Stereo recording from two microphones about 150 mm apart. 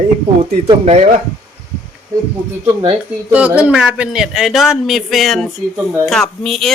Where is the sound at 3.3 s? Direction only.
10° right (ahead or behind).